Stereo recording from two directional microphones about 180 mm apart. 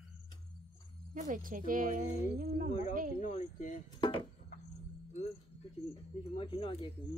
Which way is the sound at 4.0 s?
30° left (ahead or behind).